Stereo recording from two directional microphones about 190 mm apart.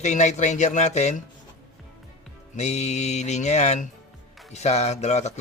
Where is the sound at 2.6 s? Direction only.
35° left (ahead or behind).